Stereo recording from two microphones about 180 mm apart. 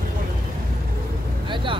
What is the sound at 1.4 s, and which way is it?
Vehicle, 25° right (ahead or behind).